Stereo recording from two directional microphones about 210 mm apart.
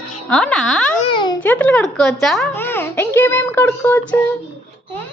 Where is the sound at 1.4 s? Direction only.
5° left (ahead or behind).